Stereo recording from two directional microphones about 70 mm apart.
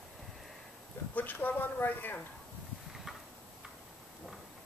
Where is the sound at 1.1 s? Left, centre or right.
Left.